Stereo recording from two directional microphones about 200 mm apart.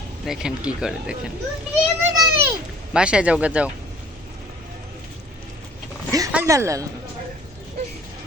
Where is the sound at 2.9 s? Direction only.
5° right (ahead or behind).